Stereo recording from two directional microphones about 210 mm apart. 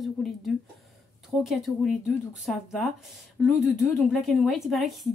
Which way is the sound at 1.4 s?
Centre (ahead or behind).